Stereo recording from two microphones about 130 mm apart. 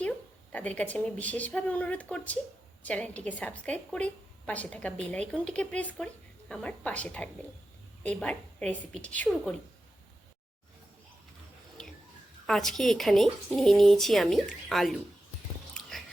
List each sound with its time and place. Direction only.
0.5 s a woman's voice: 10° left (ahead or behind)
12.5 s speech: 5° left (ahead or behind)
15.7 s a sound: centre (ahead or behind)